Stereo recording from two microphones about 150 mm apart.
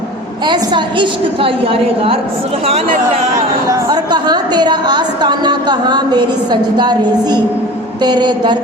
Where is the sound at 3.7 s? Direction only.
30° right (ahead or behind).